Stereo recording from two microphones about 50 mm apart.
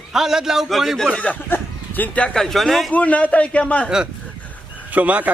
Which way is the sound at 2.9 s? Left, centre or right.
Left.